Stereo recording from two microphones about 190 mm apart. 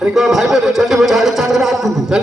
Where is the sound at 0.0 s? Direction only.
Centre (ahead or behind).